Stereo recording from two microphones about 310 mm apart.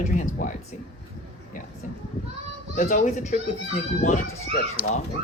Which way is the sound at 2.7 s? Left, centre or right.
Left.